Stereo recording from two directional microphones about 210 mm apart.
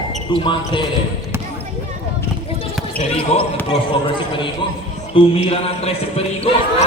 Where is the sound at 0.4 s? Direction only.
25° left (ahead or behind).